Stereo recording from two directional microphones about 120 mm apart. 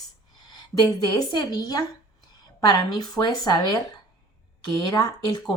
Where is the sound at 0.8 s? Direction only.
35° left (ahead or behind).